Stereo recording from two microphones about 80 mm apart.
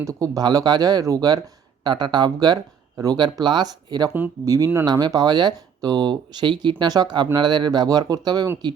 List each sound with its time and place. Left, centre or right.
0.0 s speech: right
1.8 s speech: right
4.4 s speech: right
4.9 s speech: right